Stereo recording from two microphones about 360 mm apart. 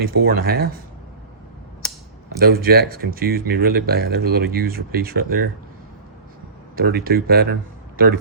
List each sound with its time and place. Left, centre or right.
0.0 s speech: right
2.4 s speech: right
6.7 s speech: right